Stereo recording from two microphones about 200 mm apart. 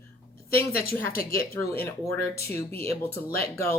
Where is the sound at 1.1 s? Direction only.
50° left (ahead or behind).